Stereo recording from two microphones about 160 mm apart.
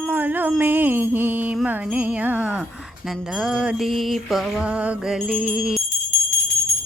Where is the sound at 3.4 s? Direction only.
5° right (ahead or behind).